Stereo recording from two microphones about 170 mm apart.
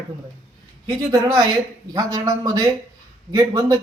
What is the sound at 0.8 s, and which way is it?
Speech, 25° right (ahead or behind).